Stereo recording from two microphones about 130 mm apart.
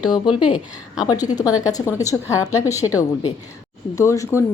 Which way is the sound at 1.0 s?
30° left (ahead or behind).